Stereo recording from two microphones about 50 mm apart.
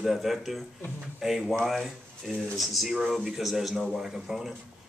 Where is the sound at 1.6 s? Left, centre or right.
Centre.